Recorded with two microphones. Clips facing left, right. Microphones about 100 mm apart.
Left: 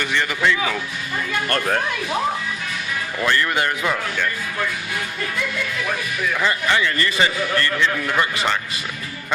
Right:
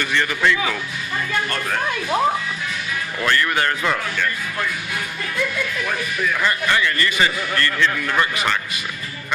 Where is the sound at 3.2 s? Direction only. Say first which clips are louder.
Right 1 dB; 20° left (ahead or behind).